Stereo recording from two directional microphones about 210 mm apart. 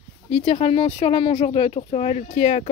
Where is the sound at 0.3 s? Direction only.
25° left (ahead or behind).